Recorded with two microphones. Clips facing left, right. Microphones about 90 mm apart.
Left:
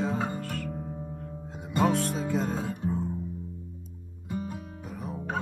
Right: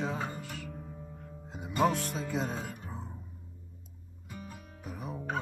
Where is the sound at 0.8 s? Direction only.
30° left (ahead or behind).